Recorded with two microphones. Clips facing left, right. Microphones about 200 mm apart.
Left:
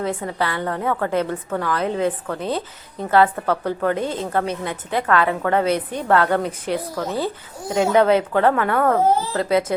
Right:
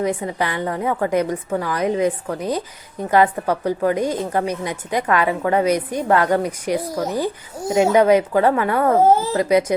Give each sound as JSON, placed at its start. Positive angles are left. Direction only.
{"t": 0.0, "sound": "a woman's voice", "side_deg": -15}